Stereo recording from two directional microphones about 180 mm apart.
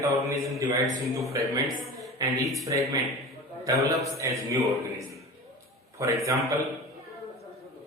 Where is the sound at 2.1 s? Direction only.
20° right (ahead or behind).